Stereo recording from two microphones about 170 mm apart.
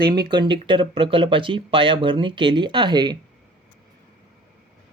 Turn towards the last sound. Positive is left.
turn(degrees=-25)  # may be behind; listen again after turning